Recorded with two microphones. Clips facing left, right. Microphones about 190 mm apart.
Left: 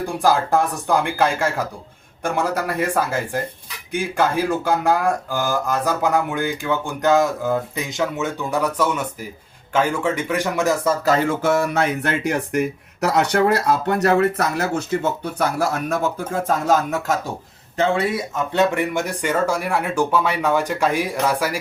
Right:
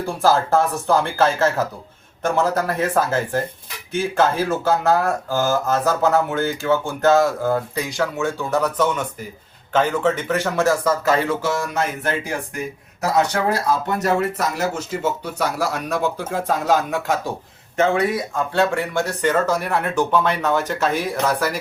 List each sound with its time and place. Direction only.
0.0 s speech: 15° left (ahead or behind)
11.0 s speech: 40° left (ahead or behind)
11.4 s a sound: 65° left (ahead or behind)
13.1 s speech: 65° left (ahead or behind); by 17.2 s 40° left (ahead or behind)
17.7 s speech: 30° left (ahead or behind); by 21.6 s 10° left (ahead or behind)